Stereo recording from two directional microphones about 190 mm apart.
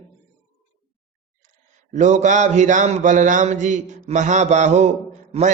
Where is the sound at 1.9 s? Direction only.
40° right (ahead or behind).